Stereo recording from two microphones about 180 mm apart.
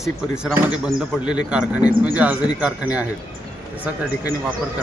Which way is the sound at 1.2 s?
25° left (ahead or behind).